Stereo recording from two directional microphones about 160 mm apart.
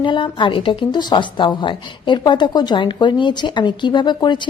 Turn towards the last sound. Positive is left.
turn(degrees=30)  # may be behind; listen again after turning